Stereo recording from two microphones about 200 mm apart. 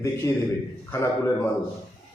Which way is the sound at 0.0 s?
15° left (ahead or behind).